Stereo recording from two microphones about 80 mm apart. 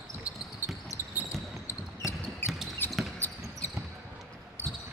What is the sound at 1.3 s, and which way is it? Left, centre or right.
Basketball bounce, left.